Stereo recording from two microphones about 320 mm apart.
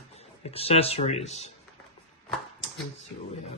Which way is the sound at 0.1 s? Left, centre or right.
Centre.